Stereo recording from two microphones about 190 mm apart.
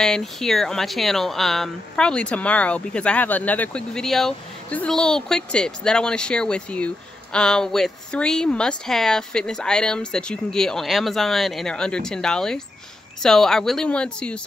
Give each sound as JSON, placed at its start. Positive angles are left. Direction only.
{"t": 0.0, "sound": "speech", "side_deg": 0}